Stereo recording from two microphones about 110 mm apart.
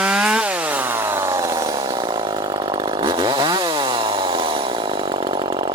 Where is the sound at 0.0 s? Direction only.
10° right (ahead or behind).